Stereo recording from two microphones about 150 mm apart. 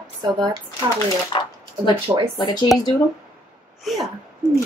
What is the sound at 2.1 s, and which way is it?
Speech, 15° right (ahead or behind).